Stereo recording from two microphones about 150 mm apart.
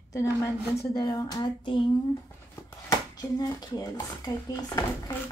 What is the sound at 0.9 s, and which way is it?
Speech, 25° left (ahead or behind).